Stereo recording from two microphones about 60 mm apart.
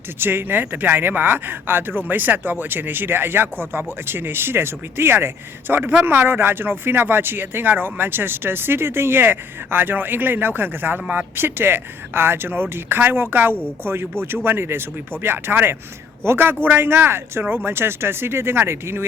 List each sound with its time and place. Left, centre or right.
0.2 s speech: right